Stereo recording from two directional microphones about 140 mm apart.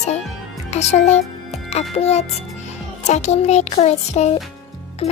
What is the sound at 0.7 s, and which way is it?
A woman's voice, 50° left (ahead or behind).